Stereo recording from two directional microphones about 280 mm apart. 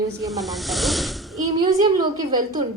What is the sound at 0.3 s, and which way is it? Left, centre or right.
Speech, centre.